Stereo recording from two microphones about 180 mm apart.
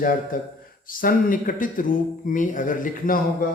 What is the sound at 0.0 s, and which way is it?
Speech, 50° left (ahead or behind).